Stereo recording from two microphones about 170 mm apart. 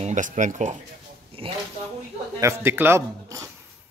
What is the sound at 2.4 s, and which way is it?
Speech, 15° right (ahead or behind).